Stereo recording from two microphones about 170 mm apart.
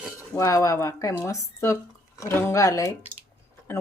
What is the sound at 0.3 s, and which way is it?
Speech, 20° left (ahead or behind).